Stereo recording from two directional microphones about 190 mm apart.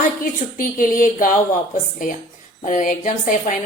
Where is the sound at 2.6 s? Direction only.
45° left (ahead or behind).